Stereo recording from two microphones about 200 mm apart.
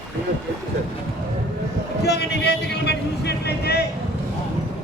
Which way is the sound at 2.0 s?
55° left (ahead or behind).